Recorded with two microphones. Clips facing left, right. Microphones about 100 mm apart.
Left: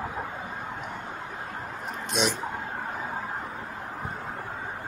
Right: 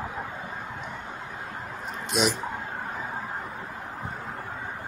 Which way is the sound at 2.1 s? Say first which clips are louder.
Right 2 dB; 5° right (ahead or behind).